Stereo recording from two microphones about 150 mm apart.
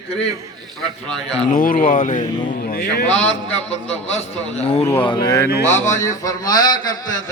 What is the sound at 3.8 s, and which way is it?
A man's voice, 45° left (ahead or behind).